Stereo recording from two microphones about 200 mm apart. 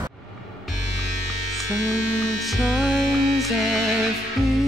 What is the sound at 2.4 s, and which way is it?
Speech, centre (ahead or behind).